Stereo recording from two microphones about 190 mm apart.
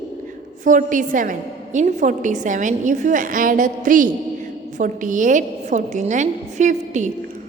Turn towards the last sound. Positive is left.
turn(degrees=-40)  # may be behind; listen again after turning